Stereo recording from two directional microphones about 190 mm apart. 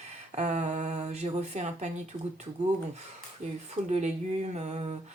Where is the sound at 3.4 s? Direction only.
40° right (ahead or behind).